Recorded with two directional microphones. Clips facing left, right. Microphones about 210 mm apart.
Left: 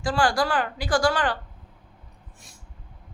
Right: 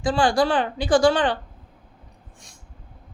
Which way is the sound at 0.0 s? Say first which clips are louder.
Right 4 dB; 20° right (ahead or behind).